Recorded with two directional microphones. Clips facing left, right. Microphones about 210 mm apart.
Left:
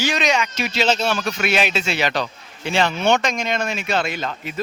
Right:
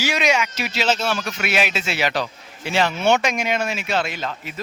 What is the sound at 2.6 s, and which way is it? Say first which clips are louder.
Speech: even; 5° right (ahead or behind).